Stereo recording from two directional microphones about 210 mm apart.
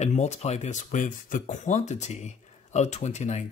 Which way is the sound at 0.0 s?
30° left (ahead or behind).